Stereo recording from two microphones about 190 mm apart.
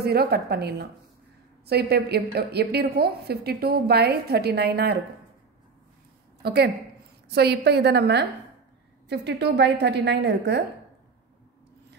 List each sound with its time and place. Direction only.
0.0 s a woman's voice: 55° right (ahead or behind)
6.4 s a woman's voice: 60° right (ahead or behind)